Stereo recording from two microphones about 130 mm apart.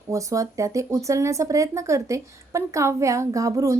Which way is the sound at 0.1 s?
25° right (ahead or behind).